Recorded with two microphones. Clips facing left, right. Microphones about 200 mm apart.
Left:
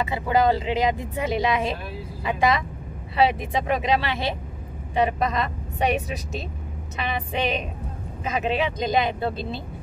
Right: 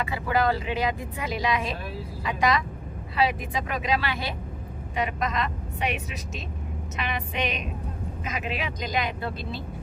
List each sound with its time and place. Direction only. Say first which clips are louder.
0.0 s a woman's voice: left 4 dB; 20° left (ahead or behind)